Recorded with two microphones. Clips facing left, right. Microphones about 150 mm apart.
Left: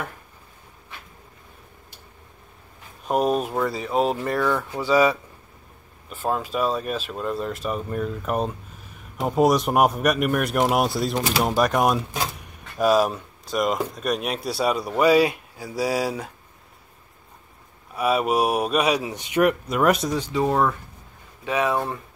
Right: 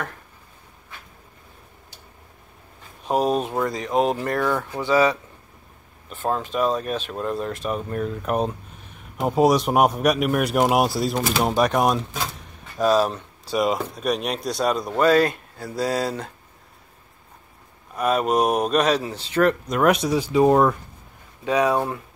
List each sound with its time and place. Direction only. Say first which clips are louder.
3.1 s speech: even; centre (ahead or behind)
4.4 s speech: left 2 dB; 10° right (ahead or behind)
4.7 s a man's voice: even; 10° left (ahead or behind)
13.5 s a man's voice: right 1 dB; 5° right (ahead or behind)
17.9 s speech: right 1 dB; 5° left (ahead or behind)
19.8 s speech: right 2 dB; centre (ahead or behind)
20.2 s speech: right 5 dB; 10° right (ahead or behind)